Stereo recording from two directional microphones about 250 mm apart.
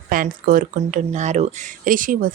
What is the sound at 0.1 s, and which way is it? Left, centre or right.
Speech, right.